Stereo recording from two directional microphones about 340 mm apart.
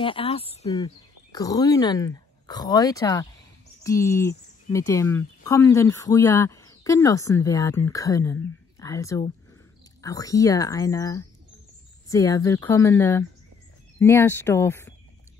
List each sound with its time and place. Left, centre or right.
0.0 s speech: centre